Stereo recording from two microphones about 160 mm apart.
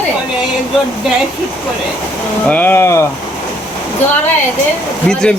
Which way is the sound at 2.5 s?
10° left (ahead or behind).